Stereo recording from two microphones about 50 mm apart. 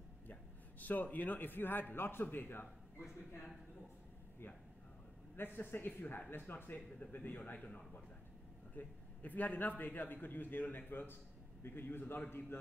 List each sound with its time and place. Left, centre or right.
0.3 s a man's voice: left
5.3 s a man's voice: left
7.5 s a man's voice: left